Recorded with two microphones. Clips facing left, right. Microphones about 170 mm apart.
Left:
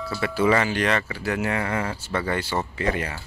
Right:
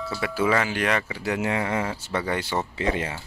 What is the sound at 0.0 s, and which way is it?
Speech, 5° right (ahead or behind).